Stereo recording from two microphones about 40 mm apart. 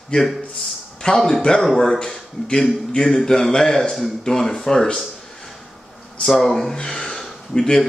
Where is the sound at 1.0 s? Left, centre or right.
Centre.